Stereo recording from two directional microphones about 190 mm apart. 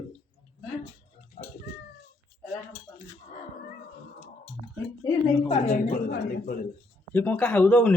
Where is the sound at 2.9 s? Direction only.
20° left (ahead or behind).